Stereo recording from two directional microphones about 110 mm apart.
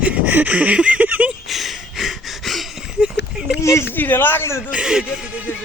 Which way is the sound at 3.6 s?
25° left (ahead or behind).